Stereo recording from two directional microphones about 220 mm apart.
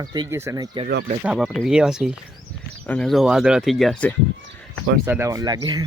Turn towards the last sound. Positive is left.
turn(degrees=-20)  # may be behind; listen again after turning